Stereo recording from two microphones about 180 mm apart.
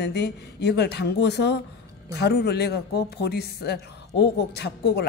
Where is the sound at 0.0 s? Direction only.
65° left (ahead or behind).